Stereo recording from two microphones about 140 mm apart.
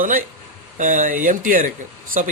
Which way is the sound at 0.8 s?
65° right (ahead or behind).